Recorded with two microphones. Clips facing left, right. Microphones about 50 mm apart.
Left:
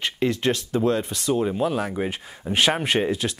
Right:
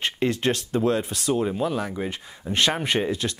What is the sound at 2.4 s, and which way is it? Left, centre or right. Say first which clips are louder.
Speech: left 2 dB; centre.